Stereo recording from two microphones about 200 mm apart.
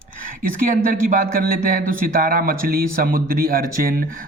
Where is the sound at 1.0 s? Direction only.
45° right (ahead or behind).